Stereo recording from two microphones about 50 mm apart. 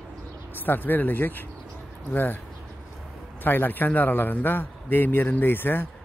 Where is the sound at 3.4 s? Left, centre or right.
Left.